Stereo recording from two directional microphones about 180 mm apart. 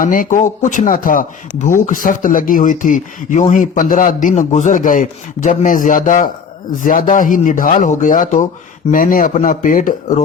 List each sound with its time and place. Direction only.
0.0 s speech: 50° left (ahead or behind)